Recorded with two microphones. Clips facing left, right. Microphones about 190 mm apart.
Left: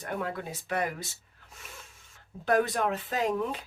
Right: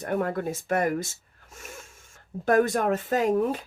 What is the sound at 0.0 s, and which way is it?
Speech, 50° right (ahead or behind).